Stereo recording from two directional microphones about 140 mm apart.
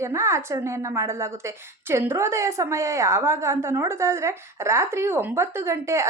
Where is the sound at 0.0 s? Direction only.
20° right (ahead or behind).